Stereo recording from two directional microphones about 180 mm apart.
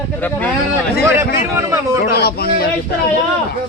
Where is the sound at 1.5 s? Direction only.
15° right (ahead or behind).